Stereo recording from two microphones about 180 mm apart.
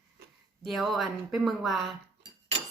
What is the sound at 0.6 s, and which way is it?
Speech, centre (ahead or behind).